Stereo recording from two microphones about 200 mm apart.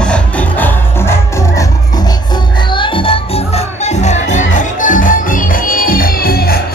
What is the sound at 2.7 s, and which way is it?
Music, 25° left (ahead or behind).